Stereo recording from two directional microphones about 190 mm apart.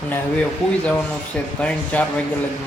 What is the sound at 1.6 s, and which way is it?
Speech, 5° left (ahead or behind).